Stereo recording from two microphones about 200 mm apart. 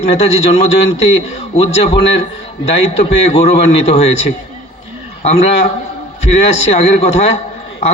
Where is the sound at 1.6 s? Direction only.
30° left (ahead or behind).